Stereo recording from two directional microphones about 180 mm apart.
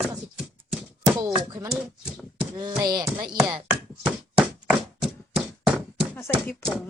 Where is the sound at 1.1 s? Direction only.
20° right (ahead or behind).